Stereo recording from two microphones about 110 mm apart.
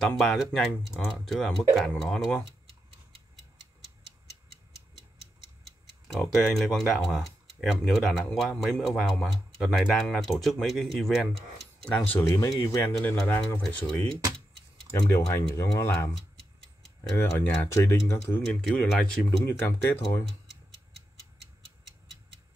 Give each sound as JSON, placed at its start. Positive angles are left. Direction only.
{"t": 0.2, "sound": "speech", "side_deg": 0}
{"t": 6.1, "sound": "speech", "side_deg": 0}
{"t": 11.8, "sound": "speech", "side_deg": 15}
{"t": 12.4, "sound": "speech", "side_deg": 30}
{"t": 13.0, "sound": "speech", "side_deg": 15}
{"t": 13.6, "sound": "speech", "side_deg": 5}
{"t": 15.0, "sound": "speech", "side_deg": 30}
{"t": 17.1, "sound": "speech", "side_deg": 15}
{"t": 17.7, "sound": "speech", "side_deg": 25}
{"t": 18.6, "sound": "speech", "side_deg": 5}
{"t": 19.4, "sound": "speech", "side_deg": 25}